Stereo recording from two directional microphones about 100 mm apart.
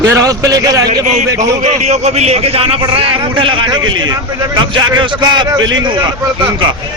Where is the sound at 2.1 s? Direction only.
90° right; by 3.5 s 60° right (ahead or behind).